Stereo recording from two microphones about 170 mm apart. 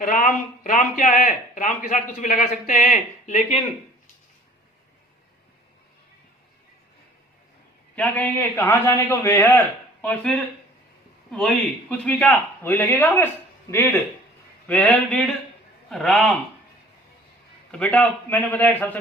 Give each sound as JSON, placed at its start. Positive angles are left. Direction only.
{"t": 0.0, "sound": "a man's voice", "side_deg": 55}
{"t": 7.9, "sound": "a man's voice", "side_deg": 10}
{"t": 17.7, "sound": "a man's voice", "side_deg": 5}